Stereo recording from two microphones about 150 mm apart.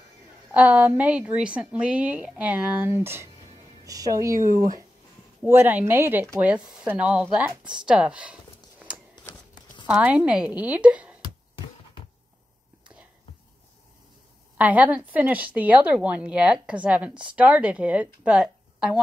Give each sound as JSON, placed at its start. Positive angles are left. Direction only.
{"t": 0.5, "sound": "a woman's voice", "side_deg": -10}
{"t": 9.8, "sound": "a woman's voice", "side_deg": -10}
{"t": 14.6, "sound": "a woman's voice", "side_deg": -10}